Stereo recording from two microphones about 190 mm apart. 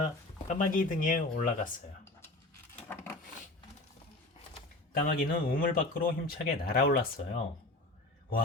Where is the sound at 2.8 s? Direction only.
10° left (ahead or behind).